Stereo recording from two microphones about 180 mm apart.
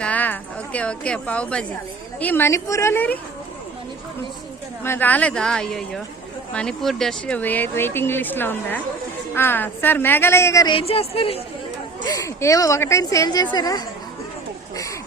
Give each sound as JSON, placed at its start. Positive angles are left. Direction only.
{"t": 0.0, "sound": "a woman's voice", "side_deg": 10}
{"t": 4.8, "sound": "a woman's voice", "side_deg": 10}
{"t": 10.8, "sound": "a woman's voice", "side_deg": 30}
{"t": 12.0, "sound": "a woman's voice", "side_deg": 20}